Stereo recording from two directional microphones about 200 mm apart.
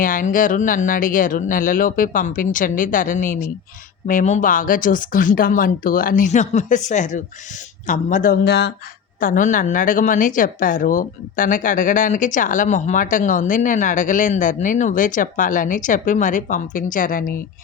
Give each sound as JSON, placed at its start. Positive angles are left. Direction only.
{"t": 0.0, "sound": "speech", "side_deg": 40}
{"t": 9.2, "sound": "speech", "side_deg": 40}